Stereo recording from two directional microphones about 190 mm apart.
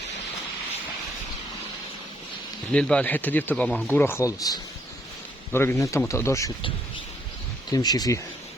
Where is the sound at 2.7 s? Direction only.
5° left (ahead or behind).